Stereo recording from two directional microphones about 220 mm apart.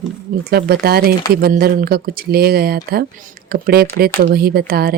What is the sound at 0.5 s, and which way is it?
Speech, 45° right (ahead or behind).